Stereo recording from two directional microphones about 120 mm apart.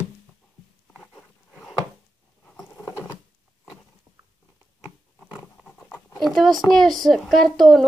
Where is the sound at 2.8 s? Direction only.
20° left (ahead or behind).